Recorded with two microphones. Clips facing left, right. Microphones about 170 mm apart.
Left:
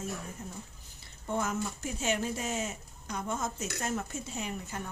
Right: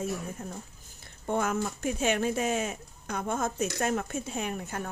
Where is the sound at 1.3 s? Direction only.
60° right (ahead or behind).